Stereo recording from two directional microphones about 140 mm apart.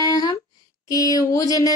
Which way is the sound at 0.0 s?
25° left (ahead or behind).